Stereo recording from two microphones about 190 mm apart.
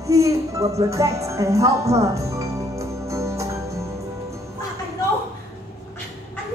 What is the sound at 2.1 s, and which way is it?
Music, 15° right (ahead or behind).